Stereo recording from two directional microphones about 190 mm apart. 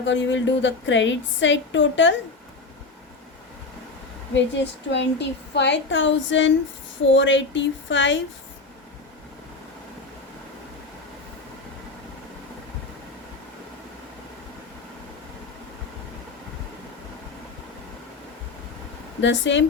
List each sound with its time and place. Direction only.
0.0 s a woman's voice: 75° left (ahead or behind)
4.4 s a woman's voice: 65° left (ahead or behind)
19.2 s a woman's voice: 75° left (ahead or behind)